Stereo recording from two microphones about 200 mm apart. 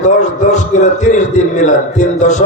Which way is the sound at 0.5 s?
35° left (ahead or behind).